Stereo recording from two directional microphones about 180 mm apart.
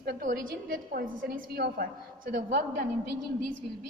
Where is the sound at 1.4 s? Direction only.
65° right (ahead or behind).